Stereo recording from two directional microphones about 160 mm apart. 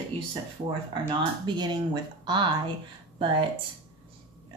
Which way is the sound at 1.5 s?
30° right (ahead or behind).